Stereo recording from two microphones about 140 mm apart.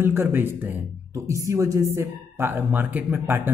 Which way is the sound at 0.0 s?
15° right (ahead or behind).